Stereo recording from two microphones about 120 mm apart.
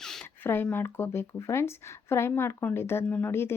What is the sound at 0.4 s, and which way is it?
Speech, 20° left (ahead or behind).